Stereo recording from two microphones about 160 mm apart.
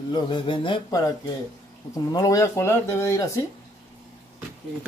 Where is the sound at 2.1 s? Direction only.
20° left (ahead or behind).